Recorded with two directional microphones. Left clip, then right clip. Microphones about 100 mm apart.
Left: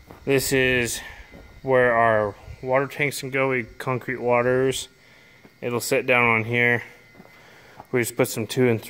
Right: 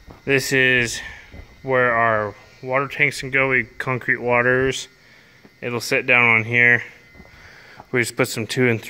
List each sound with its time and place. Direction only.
0.2 s speech: 20° left (ahead or behind)
1.7 s speech: 35° left (ahead or behind)
3.1 s speech: 15° left (ahead or behind)
4.6 s speech: 20° left (ahead or behind)